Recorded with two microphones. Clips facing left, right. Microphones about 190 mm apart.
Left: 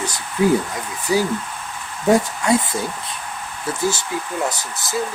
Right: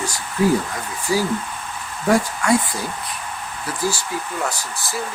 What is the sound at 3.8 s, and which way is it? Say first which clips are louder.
Speech: left 2 dB; 25° left (ahead or behind).